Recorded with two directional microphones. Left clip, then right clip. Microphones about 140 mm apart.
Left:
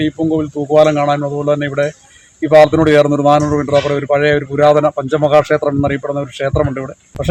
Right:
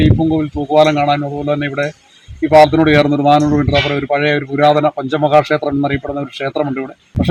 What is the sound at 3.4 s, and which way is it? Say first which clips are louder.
Speech: left 1 dB; 20° left (ahead or behind).